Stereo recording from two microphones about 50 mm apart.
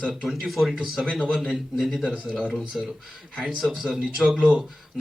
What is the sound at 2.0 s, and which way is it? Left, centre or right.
Speech, right.